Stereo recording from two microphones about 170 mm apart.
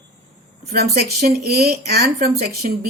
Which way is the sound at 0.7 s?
65° right (ahead or behind).